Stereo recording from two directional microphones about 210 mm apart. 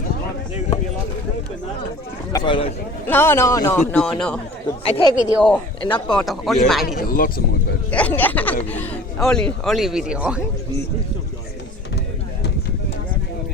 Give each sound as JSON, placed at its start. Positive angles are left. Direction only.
{"t": 2.3, "sound": "speech", "side_deg": 20}
{"t": 3.1, "sound": "a man's voice", "side_deg": 10}
{"t": 4.8, "sound": "speech", "side_deg": 25}
{"t": 5.4, "sound": "speech", "side_deg": 5}
{"t": 6.8, "sound": "speech", "side_deg": 40}
{"t": 7.9, "sound": "a man's voice", "side_deg": 5}